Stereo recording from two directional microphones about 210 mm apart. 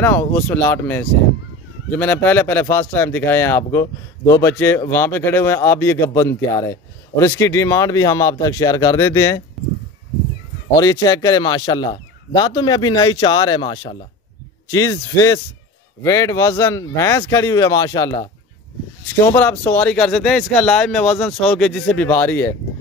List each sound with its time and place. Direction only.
0.0 s a man's voice: 10° left (ahead or behind)
10.8 s a man's voice: 15° left (ahead or behind)
19.3 s a man's voice: 10° left (ahead or behind)